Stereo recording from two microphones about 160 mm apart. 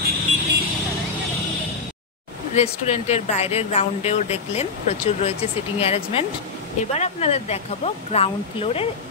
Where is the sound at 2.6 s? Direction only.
45° left (ahead or behind).